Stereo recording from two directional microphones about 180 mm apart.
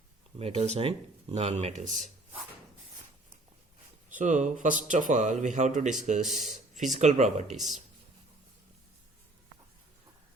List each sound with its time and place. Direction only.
0.3 s speech: 35° right (ahead or behind)
4.1 s speech: 45° right (ahead or behind)
7.4 s speech: centre (ahead or behind)